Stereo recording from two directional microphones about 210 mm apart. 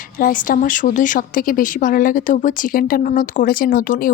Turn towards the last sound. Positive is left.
turn(degrees=45)  # may be behind; listen again after turning